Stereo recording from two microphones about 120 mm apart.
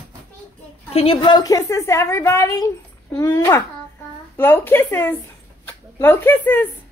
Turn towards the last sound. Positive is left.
turn(degrees=15)  # may be behind; listen again after turning